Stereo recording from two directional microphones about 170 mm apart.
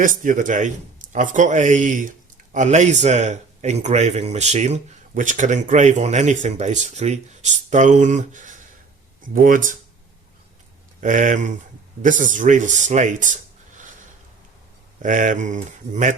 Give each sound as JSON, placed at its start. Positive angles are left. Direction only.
{"t": 0.0, "sound": "a man's voice", "side_deg": -50}
{"t": 11.0, "sound": "a man's voice", "side_deg": -50}
{"t": 15.0, "sound": "a man's voice", "side_deg": -50}